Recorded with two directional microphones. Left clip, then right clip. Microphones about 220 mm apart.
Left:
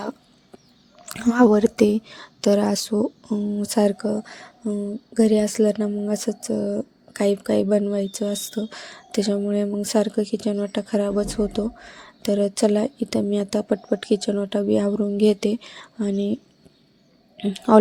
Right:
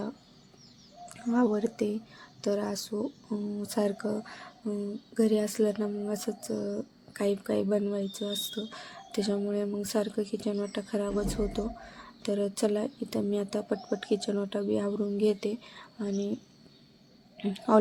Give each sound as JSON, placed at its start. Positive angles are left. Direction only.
{"t": 1.0, "sound": "a woman's voice", "side_deg": 45}